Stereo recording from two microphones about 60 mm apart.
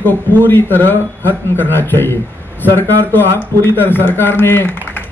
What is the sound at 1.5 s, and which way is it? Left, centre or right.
A man's voice, left.